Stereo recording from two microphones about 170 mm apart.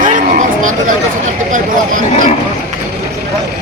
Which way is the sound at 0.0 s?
50° right (ahead or behind).